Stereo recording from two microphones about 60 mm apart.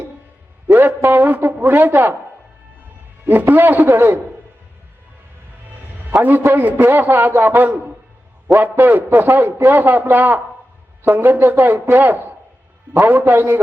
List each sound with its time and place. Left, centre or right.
0.7 s a sound: right
1.1 s a woman's voice: right
3.2 s a man's voice: right
6.2 s a man's voice: right